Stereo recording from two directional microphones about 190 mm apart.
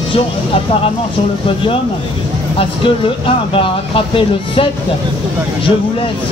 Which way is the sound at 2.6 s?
30° left (ahead or behind).